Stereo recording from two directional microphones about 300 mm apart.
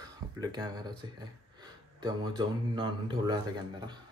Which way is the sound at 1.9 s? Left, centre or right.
Centre.